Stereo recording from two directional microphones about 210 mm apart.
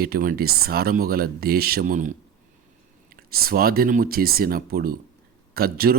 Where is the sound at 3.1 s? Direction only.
45° right (ahead or behind).